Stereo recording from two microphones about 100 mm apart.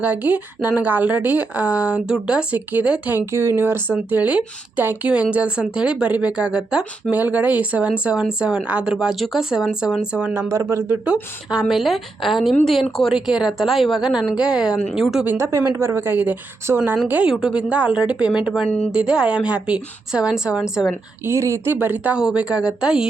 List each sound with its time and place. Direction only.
0.0 s speech: 15° right (ahead or behind)
10.3 s a woman's voice: 30° right (ahead or behind)
11.0 s speech: 10° right (ahead or behind)
15.2 s a woman's voice: 20° right (ahead or behind)
21.2 s speech: 30° right (ahead or behind); by 23.0 s 10° right (ahead or behind)